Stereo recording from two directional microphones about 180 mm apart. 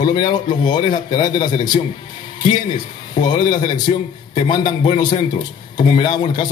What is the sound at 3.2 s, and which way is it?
Speech, 20° left (ahead or behind).